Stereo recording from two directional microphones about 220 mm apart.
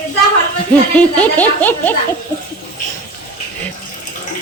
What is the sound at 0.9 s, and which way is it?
A woman's voice, 5° left (ahead or behind).